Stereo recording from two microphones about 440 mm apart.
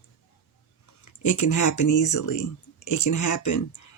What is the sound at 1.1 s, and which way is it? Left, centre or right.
A woman's voice, left.